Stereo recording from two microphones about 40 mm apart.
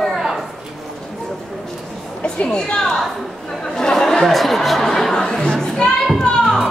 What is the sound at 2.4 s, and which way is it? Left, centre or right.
Speech, left.